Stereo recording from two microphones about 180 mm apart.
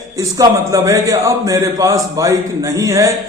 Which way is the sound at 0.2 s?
20° right (ahead or behind).